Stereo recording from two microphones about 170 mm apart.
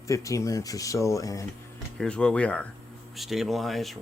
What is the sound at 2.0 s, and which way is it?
Speech, 5° left (ahead or behind).